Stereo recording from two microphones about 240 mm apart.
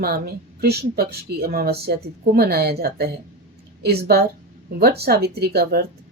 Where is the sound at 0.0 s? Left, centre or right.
Right.